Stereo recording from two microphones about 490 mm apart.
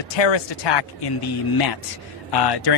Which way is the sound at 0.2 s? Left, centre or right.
Left.